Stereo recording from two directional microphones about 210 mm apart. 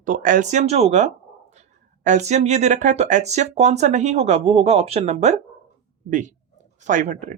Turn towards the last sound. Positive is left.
turn(degrees=-35)  # may be behind; listen again after turning